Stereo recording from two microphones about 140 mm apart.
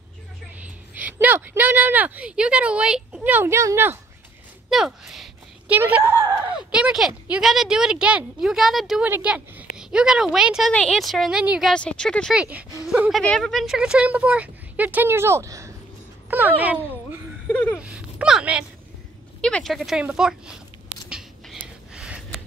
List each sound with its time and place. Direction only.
0.6 s speech: 10° right (ahead or behind)
4.6 s a sound: centre (ahead or behind)
5.8 s speech: 15° right (ahead or behind)
11.7 s speech: 5° left (ahead or behind)
12.4 s speech: 10° right (ahead or behind)
17.5 s a sound: 10° left (ahead or behind)
17.7 s speech: 5° right (ahead or behind)
19.4 s speech: 5° left (ahead or behind)
21.1 s a sound: 5° right (ahead or behind)